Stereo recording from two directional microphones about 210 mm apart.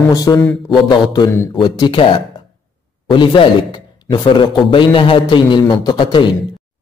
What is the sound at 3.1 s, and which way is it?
A man's voice, 25° left (ahead or behind).